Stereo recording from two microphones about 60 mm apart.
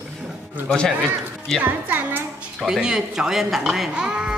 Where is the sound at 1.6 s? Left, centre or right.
Right.